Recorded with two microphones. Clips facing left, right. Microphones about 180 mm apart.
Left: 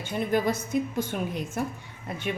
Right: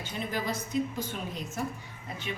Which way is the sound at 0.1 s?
55° left (ahead or behind).